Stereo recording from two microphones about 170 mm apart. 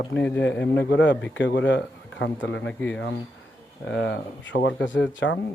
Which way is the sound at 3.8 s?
90° left.